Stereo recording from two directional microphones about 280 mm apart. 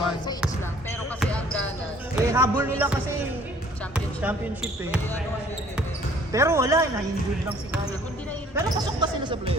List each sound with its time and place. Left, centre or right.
0.9 s basketball bounce: centre
2.2 s speech: centre
6.3 s speech: centre
8.5 s speech: centre